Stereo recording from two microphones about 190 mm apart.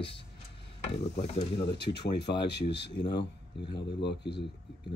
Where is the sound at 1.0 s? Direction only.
35° left (ahead or behind).